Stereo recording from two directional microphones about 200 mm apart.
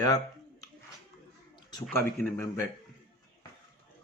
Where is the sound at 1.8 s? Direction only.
10° left (ahead or behind).